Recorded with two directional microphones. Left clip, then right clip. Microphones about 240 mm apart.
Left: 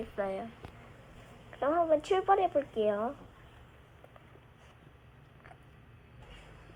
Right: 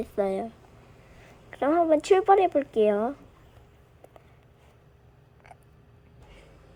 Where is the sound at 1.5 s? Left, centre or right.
Right.